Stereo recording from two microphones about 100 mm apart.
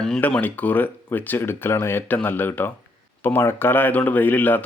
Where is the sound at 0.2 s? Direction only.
15° left (ahead or behind).